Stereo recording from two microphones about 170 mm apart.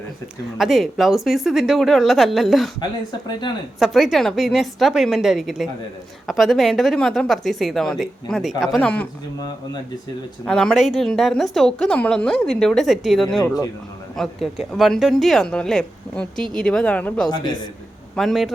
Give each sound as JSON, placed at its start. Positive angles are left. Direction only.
{"t": 0.6, "sound": "a woman's voice", "side_deg": 0}
{"t": 3.8, "sound": "a woman's voice", "side_deg": 0}
{"t": 10.4, "sound": "a woman's voice", "side_deg": 5}
{"t": 13.4, "sound": "speech", "side_deg": 20}
{"t": 14.2, "sound": "a woman's voice", "side_deg": 0}
{"t": 17.2, "sound": "speech", "side_deg": 25}
{"t": 18.2, "sound": "a woman's voice", "side_deg": 0}